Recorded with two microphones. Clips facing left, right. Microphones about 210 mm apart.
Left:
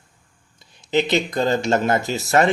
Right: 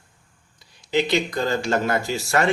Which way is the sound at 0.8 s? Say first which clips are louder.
Left 2 dB; 20° left (ahead or behind).